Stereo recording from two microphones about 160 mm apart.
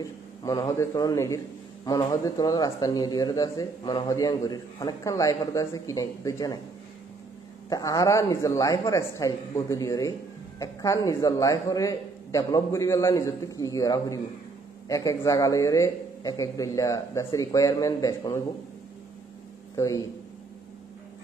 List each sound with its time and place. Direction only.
0.4 s speech: 25° left (ahead or behind)
7.7 s speech: 20° left (ahead or behind)
19.7 s a man's voice: 20° left (ahead or behind)